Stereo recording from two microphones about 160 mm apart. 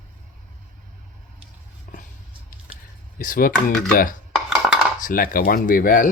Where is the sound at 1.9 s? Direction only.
60° left (ahead or behind).